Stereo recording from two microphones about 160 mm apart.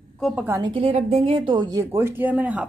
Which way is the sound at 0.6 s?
35° right (ahead or behind).